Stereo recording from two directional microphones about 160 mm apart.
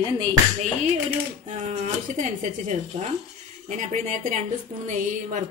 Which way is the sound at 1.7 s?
50° right (ahead or behind).